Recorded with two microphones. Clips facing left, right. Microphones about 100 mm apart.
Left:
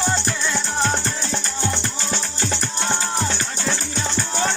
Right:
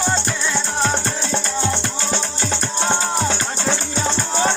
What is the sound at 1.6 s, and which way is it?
Music, 50° right (ahead or behind).